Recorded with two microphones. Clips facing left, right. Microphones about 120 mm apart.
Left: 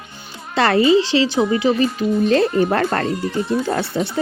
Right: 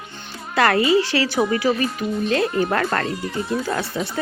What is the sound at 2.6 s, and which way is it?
Speech, 35° left (ahead or behind).